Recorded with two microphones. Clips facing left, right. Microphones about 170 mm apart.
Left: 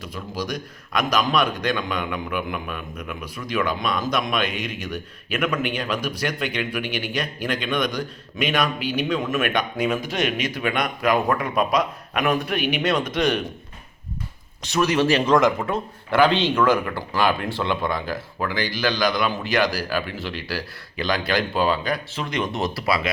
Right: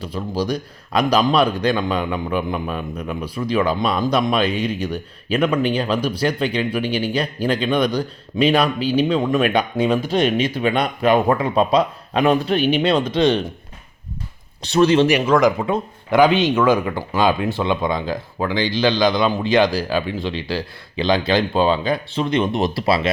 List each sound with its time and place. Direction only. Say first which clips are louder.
0.0 s speech: right 7 dB; 30° right (ahead or behind)
14.6 s speech: right 6 dB; 30° right (ahead or behind)
15.2 s speech: right 2 dB; 5° right (ahead or behind)
15.6 s speech: right 4 dB; 15° right (ahead or behind)